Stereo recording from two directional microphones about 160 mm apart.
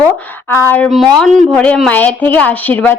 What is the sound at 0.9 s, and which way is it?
A woman's voice, centre (ahead or behind).